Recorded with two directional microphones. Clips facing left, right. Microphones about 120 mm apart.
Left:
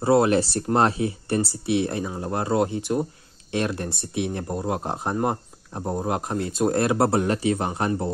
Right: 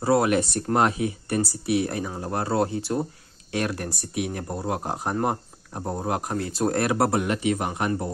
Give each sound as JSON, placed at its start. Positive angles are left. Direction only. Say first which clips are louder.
{"t": 0.0, "sound": "speech", "louder": "left 2 dB", "side_deg": 25}